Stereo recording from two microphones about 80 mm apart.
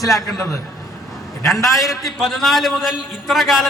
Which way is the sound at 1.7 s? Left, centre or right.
Centre.